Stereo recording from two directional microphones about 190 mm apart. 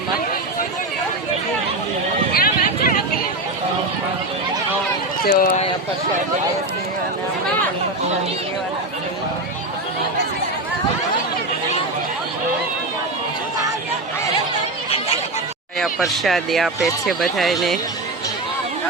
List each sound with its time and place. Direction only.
2.3 s a sound: 50° left (ahead or behind)
5.2 s speech: 50° left (ahead or behind)
15.8 s speech: centre (ahead or behind)